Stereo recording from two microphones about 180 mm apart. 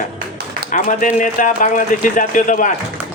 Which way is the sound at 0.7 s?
45° left (ahead or behind).